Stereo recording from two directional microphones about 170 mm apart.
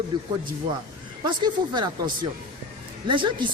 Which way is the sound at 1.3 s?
25° right (ahead or behind).